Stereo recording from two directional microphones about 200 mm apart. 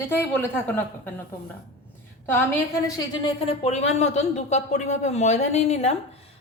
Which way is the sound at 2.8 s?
25° left (ahead or behind).